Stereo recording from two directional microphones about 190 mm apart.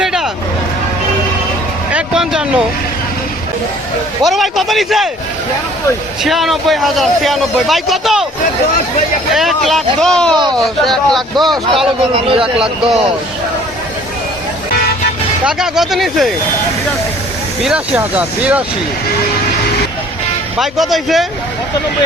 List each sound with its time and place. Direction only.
0.0 s vehicle: 5° right (ahead or behind)
1.9 s vehicle: 5° right (ahead or behind)
4.2 s a man's voice: centre (ahead or behind)
6.2 s a man's voice: centre (ahead or behind)
9.3 s a man's voice: centre (ahead or behind)
12.1 s speech: 30° right (ahead or behind)
15.4 s a man's voice: 5° right (ahead or behind)
17.6 s speech: 5° right (ahead or behind)
20.6 s a man's voice: centre (ahead or behind)